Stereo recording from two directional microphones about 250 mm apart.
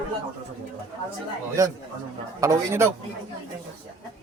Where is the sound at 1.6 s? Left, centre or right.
Centre.